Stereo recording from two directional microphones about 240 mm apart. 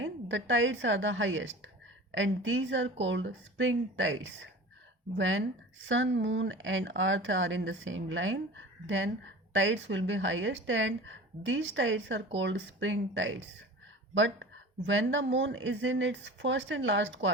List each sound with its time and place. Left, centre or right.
0.0 s a woman's voice: right